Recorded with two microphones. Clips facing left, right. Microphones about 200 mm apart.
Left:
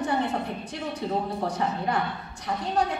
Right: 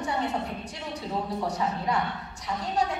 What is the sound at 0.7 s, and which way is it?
A woman's voice, 55° left (ahead or behind).